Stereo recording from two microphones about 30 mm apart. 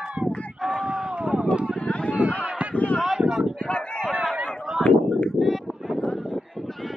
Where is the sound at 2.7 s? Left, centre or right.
Left.